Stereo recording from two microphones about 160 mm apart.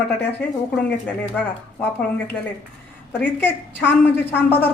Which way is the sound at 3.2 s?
10° left (ahead or behind).